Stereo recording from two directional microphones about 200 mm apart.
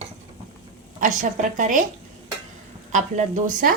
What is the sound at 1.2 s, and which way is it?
Speech, 40° right (ahead or behind).